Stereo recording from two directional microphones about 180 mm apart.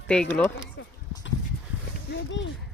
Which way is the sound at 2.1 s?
90° left.